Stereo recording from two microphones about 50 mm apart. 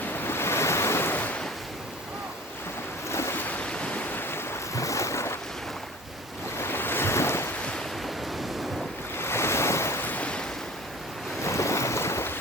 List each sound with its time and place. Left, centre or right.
0.2 s waves: left
3.1 s waves: left
3.3 s waves: left
3.6 s waves: left
4.1 s waves: left
4.7 s waves: left
6.6 s waves: left
9.1 s waves: left
10.0 s waves: left
11.4 s boat: left